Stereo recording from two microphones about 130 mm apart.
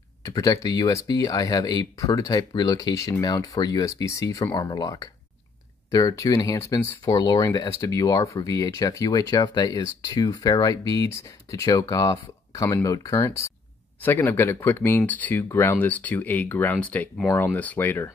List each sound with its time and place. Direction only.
0.2 s speech: 25° left (ahead or behind)